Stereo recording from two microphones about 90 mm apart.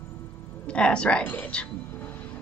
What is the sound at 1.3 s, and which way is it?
Music, 15° left (ahead or behind).